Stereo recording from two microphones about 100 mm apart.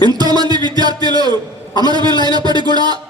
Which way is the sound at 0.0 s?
45° right (ahead or behind).